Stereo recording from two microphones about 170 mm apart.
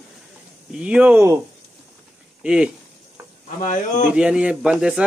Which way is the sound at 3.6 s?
50° left (ahead or behind).